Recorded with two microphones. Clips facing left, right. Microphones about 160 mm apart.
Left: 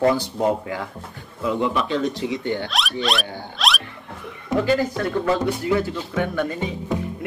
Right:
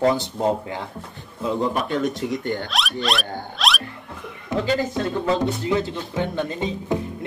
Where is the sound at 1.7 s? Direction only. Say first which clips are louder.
Even; 50° right (ahead or behind).